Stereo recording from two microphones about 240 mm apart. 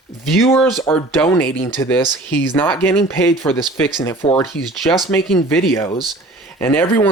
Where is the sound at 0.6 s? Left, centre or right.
Centre.